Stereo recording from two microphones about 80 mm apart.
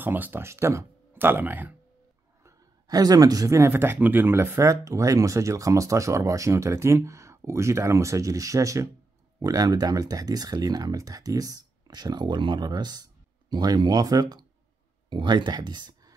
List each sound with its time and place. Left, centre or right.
0.0 s speech: right
1.1 s speech: right
2.9 s speech: right
15.0 s speech: right